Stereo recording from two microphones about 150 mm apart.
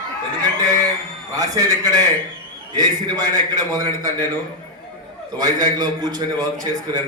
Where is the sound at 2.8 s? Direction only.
30° right (ahead or behind).